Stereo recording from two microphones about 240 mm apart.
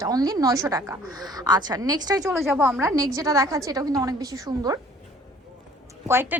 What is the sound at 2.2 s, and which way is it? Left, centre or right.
A woman's voice, centre.